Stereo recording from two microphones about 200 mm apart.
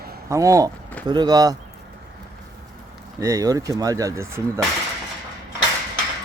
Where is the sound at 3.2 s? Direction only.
15° right (ahead or behind).